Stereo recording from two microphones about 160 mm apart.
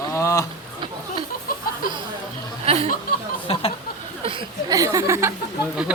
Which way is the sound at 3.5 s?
35° left (ahead or behind).